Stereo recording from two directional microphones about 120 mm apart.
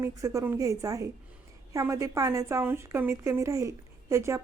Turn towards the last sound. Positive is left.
turn(degrees=-25)  # may be behind; listen again after turning